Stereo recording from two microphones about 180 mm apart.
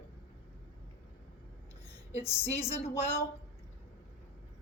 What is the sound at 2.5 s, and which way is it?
Speech, 35° left (ahead or behind).